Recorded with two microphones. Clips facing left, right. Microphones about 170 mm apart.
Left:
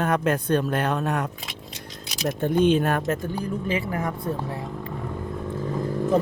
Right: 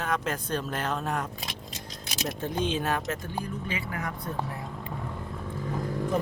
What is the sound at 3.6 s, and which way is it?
Speech, 30° left (ahead or behind).